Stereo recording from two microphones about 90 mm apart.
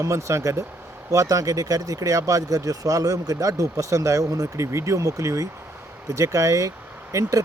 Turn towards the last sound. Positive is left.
turn(degrees=-35)  # may be behind; listen again after turning